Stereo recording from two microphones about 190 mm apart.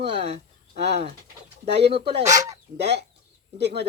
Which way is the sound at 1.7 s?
60° right (ahead or behind).